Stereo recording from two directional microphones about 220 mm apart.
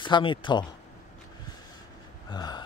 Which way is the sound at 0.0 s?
20° left (ahead or behind).